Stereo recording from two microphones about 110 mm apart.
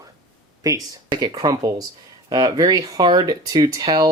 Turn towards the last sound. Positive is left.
turn(degrees=-35)  # may be behind; listen again after turning